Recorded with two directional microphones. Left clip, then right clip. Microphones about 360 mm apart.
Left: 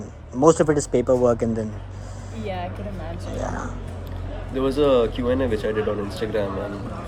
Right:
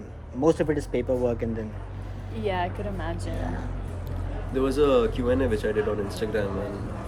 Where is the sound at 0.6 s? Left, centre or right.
Left.